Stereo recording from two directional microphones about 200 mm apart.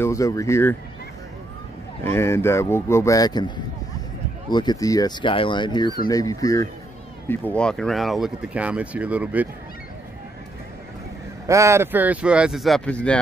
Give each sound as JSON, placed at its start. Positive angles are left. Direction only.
{"t": 0.0, "sound": "speech", "side_deg": 15}
{"t": 2.0, "sound": "speech", "side_deg": 15}
{"t": 11.4, "sound": "speech", "side_deg": -15}